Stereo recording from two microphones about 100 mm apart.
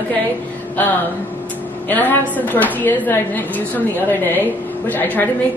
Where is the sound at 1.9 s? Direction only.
20° left (ahead or behind).